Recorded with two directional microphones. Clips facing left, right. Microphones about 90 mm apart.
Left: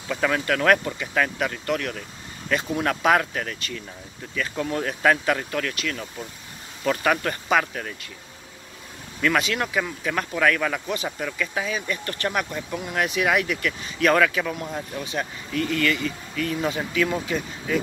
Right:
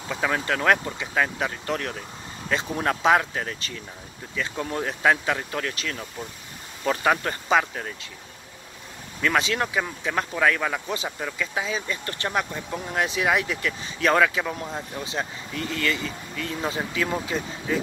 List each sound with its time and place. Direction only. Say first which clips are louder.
0.1 s speech: left 2 dB; 20° right (ahead or behind)
9.2 s speech: left 1 dB; 25° right (ahead or behind)